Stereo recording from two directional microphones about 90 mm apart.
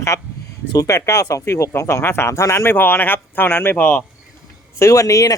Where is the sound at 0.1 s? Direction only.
35° left (ahead or behind).